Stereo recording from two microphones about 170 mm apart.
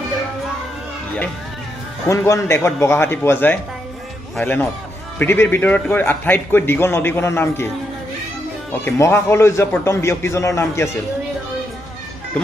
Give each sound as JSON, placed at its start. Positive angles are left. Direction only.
{"t": 2.0, "sound": "a man's voice", "side_deg": 15}
{"t": 8.8, "sound": "a man's voice", "side_deg": 15}